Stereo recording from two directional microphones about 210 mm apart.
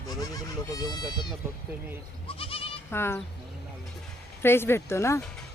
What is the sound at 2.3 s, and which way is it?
Goat, 25° left (ahead or behind).